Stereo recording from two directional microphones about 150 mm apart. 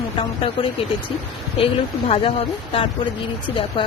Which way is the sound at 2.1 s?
35° left (ahead or behind).